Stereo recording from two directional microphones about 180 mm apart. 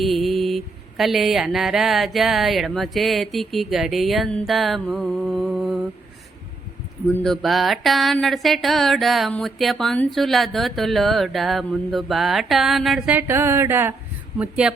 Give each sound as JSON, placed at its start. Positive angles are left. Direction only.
{"t": 0.0, "sound": "music", "side_deg": 0}
{"t": 4.9, "sound": "mantra", "side_deg": 0}
{"t": 7.1, "sound": "music", "side_deg": 5}
{"t": 14.3, "sound": "speech", "side_deg": -5}